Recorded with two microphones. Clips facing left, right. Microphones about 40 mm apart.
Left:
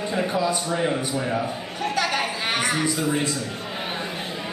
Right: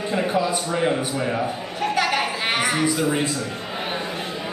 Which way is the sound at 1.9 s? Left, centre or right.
Centre.